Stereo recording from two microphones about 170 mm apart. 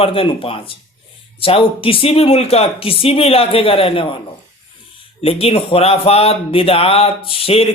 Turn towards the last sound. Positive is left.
turn(degrees=35)  # may be behind; listen again after turning